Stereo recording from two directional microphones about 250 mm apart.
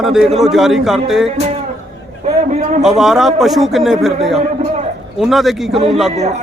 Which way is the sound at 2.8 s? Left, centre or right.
Centre.